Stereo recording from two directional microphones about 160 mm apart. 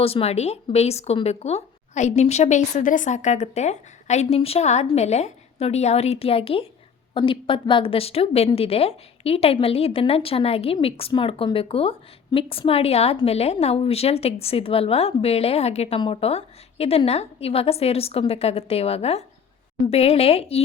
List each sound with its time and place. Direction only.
0.0 s a woman's voice: 40° left (ahead or behind)